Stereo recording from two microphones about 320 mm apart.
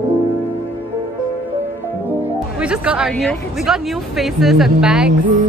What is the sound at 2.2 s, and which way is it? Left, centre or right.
Speech, centre.